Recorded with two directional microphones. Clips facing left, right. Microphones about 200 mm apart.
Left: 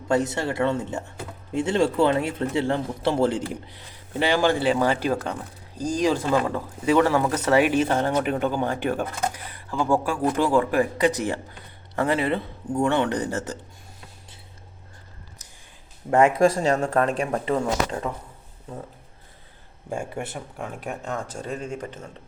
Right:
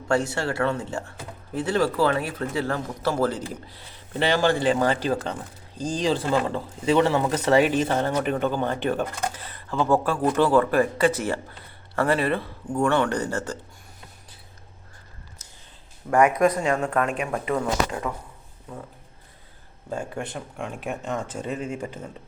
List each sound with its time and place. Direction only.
0.1 s a man's voice: 20° left (ahead or behind)
4.2 s speech: 10° left (ahead or behind)
6.5 s speech: 20° right (ahead or behind)
7.6 s a man's voice: 10° left (ahead or behind)
15.4 s a sound: 15° left (ahead or behind)
16.0 s a man's voice: 25° left (ahead or behind)
19.9 s speech: 10° left (ahead or behind); by 22.0 s 10° right (ahead or behind)